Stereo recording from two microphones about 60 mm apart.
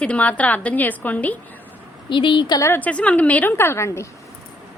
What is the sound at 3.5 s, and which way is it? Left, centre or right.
Speech, left.